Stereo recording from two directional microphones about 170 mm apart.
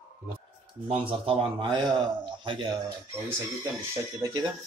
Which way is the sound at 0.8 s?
30° right (ahead or behind).